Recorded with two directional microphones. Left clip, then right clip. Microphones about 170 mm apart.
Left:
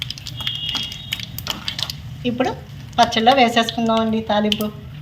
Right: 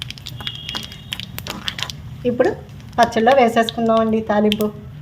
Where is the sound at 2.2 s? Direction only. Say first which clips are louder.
Right 4 dB; 45° right (ahead or behind).